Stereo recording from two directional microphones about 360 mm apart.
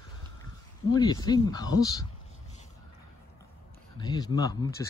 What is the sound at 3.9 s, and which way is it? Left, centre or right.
Speech, centre.